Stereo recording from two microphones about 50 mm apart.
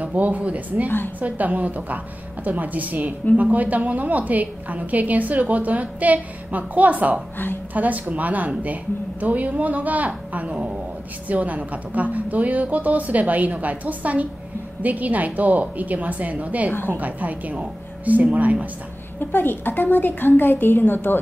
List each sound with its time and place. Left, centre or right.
0.0 s speech: right
0.8 s a woman's voice: left
1.2 s a woman's voice: right
19.1 s a woman's voice: left